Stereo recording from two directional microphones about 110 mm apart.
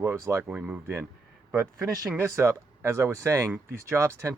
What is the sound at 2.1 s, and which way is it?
Speech, 20° right (ahead or behind).